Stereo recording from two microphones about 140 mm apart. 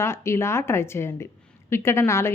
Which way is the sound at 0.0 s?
20° left (ahead or behind).